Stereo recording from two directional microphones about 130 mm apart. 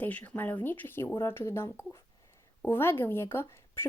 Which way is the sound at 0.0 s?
10° left (ahead or behind).